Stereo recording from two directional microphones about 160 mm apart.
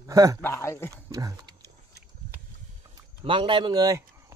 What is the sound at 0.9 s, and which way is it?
Speech, 20° right (ahead or behind).